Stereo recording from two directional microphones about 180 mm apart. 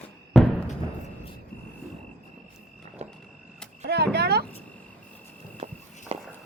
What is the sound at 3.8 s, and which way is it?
Speech, 65° right (ahead or behind).